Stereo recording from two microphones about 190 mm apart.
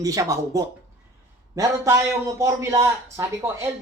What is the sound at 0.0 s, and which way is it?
A man's voice, 15° right (ahead or behind).